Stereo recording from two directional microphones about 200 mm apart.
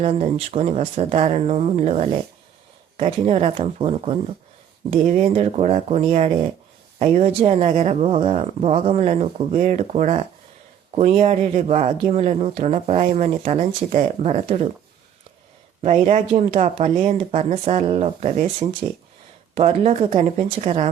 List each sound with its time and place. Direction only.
0.0 s speech: 30° right (ahead or behind)
15.8 s speech: 35° right (ahead or behind)